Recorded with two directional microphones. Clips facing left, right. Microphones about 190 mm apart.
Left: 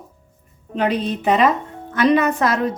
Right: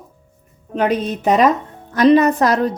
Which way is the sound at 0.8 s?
45° right (ahead or behind).